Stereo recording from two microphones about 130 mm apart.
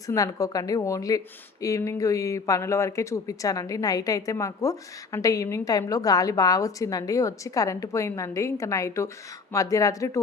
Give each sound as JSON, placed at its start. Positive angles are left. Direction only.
{"t": 0.1, "sound": "speech", "side_deg": 25}